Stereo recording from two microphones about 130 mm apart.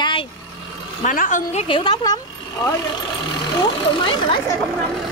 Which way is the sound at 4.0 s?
40° left (ahead or behind).